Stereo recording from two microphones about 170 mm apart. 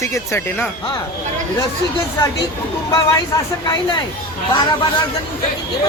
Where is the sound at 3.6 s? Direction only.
25° left (ahead or behind).